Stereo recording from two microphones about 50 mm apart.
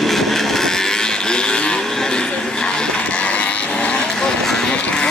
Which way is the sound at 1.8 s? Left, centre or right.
Centre.